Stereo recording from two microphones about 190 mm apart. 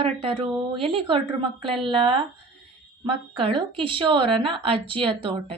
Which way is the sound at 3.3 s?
30° right (ahead or behind).